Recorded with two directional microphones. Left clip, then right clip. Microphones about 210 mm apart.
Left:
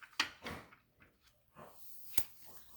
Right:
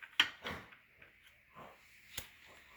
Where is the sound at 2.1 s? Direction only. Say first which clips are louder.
Left 1 dB; 45° left (ahead or behind).